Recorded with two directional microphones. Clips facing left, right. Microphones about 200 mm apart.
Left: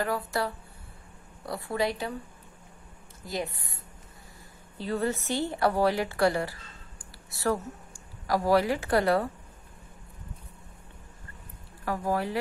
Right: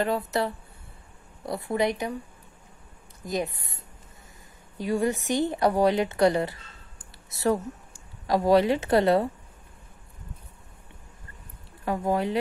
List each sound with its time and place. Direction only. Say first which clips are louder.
0.0 s speech: right 4 dB; 20° right (ahead or behind)
3.3 s a woman's voice: right 4 dB; 20° right (ahead or behind)
11.8 s speech: right 3 dB; 20° right (ahead or behind)